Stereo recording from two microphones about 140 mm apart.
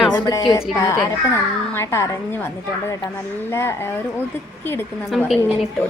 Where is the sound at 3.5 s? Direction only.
20° left (ahead or behind).